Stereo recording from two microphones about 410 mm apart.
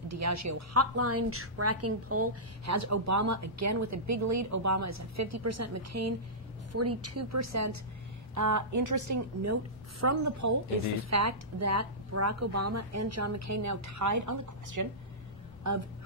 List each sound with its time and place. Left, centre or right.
0.1 s a woman's voice: right